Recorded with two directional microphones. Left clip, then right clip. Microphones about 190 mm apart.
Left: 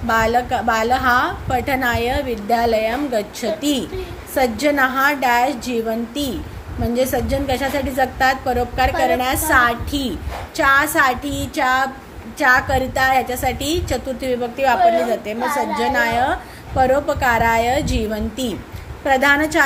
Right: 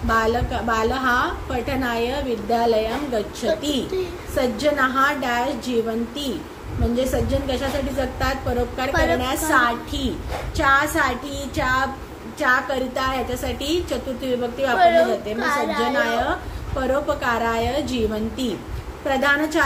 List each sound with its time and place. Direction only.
0.1 s a woman's voice: 40° left (ahead or behind)
8.9 s a woman's voice: 10° right (ahead or behind)
9.5 s a woman's voice: 35° left (ahead or behind)
15.8 s a woman's voice: 35° left (ahead or behind)